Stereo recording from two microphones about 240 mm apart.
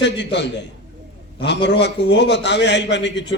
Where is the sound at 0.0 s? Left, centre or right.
Left.